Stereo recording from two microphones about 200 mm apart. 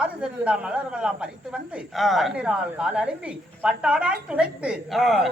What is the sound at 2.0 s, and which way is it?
Speech, centre (ahead or behind).